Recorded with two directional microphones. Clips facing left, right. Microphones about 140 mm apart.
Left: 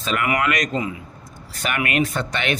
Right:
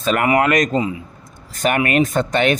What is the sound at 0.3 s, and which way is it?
Speech, 30° right (ahead or behind).